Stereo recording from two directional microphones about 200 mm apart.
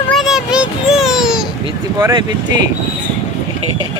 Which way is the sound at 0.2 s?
5° right (ahead or behind).